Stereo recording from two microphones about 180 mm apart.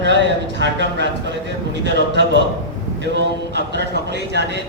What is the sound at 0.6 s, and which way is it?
Speech, 75° right (ahead or behind).